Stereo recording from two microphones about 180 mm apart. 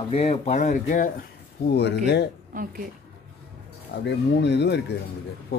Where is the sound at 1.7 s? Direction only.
65° left (ahead or behind).